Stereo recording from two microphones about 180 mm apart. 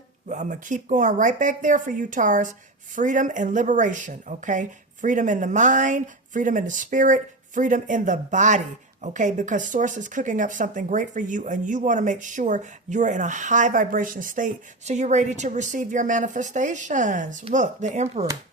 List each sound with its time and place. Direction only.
0.3 s a woman's voice: 45° right (ahead or behind)